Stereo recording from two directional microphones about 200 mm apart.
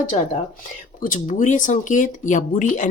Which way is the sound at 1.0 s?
40° left (ahead or behind).